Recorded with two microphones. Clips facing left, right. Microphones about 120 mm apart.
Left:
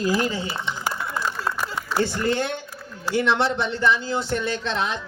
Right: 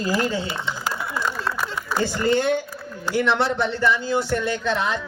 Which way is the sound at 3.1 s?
25° left (ahead or behind).